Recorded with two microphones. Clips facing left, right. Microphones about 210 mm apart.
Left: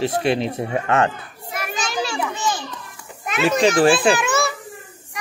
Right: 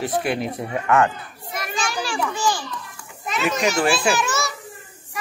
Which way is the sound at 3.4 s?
30° left (ahead or behind).